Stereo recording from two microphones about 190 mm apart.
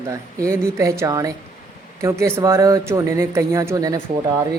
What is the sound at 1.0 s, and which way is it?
Speech, 15° right (ahead or behind).